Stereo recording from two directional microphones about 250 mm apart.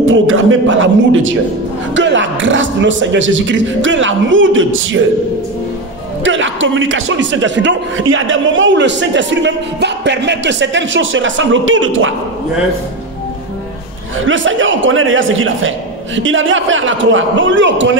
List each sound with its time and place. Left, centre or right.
0.0 s a man's voice: right
6.2 s a man's voice: right
14.2 s a man's voice: right